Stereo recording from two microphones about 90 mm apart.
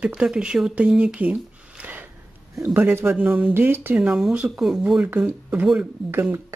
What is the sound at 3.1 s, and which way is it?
Speech, 15° right (ahead or behind).